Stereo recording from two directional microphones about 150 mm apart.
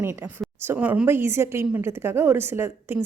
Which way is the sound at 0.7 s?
10° right (ahead or behind).